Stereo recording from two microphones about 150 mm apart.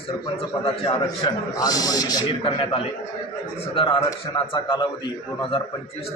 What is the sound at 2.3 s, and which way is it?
A man's voice, 40° left (ahead or behind).